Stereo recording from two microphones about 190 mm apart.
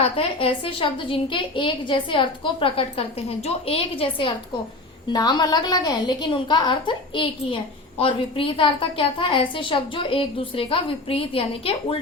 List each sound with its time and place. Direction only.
0.0 s a woman's voice: 30° left (ahead or behind)